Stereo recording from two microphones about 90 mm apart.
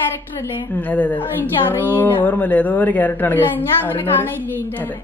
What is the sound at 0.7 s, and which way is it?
A woman's voice, 20° left (ahead or behind).